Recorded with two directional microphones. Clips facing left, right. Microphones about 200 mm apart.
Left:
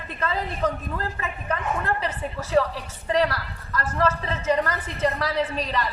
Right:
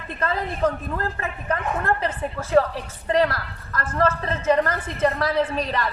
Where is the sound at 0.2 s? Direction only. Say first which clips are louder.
Right 3 dB; 50° right (ahead or behind).